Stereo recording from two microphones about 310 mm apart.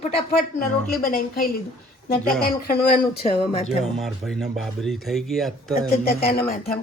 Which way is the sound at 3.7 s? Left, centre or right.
Centre.